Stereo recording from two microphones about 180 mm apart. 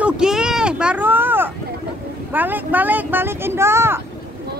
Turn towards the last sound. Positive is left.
turn(degrees=-15)  # may be behind; listen again after turning